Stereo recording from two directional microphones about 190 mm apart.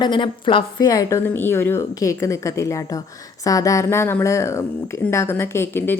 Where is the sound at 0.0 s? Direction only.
25° left (ahead or behind).